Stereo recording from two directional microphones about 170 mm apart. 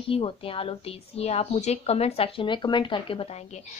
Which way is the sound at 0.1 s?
35° left (ahead or behind).